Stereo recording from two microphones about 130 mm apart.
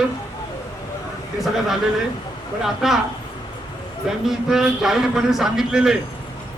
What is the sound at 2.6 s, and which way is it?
Speech, centre (ahead or behind).